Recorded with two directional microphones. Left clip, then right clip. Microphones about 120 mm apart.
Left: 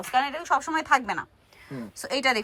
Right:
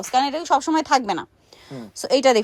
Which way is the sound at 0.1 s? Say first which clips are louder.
Right 5 dB; 55° right (ahead or behind).